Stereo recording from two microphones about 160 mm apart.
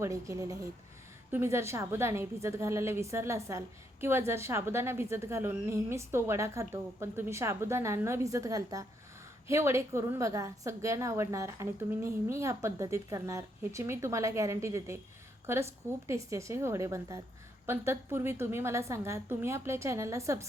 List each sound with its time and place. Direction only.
0.0 s a woman's voice: 20° right (ahead or behind)